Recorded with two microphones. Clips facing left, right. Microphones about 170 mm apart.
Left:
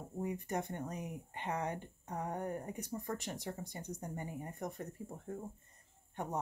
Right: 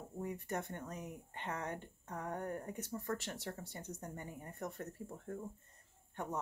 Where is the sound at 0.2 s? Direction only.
15° left (ahead or behind).